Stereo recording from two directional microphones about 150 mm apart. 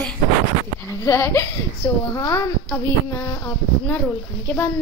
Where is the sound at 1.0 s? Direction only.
15° left (ahead or behind).